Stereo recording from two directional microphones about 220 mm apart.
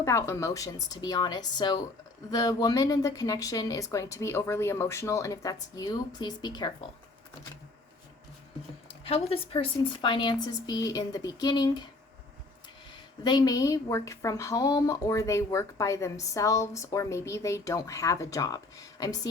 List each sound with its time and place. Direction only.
0.0 s a woman's voice: 10° left (ahead or behind)
8.9 s a woman's voice: 25° left (ahead or behind)
13.2 s a woman's voice: 15° left (ahead or behind)